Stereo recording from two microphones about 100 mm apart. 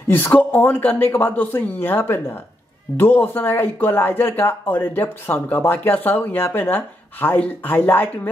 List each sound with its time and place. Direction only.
0.1 s speech: 20° left (ahead or behind)